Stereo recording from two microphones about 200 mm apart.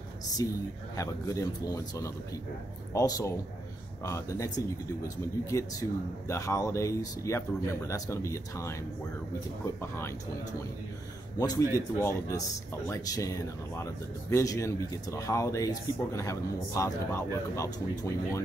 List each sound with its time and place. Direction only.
0.4 s speech: 15° left (ahead or behind)
11.3 s speech: 15° left (ahead or behind)